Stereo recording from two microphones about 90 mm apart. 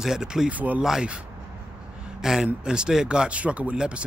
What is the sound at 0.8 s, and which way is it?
Speech, 5° right (ahead or behind).